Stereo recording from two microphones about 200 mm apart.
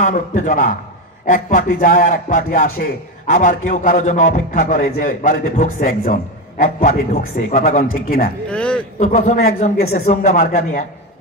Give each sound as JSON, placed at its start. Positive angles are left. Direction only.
{"t": 0.0, "sound": "a man's voice", "side_deg": 40}
{"t": 8.5, "sound": "a sound", "side_deg": 5}
{"t": 9.0, "sound": "a man's voice", "side_deg": 35}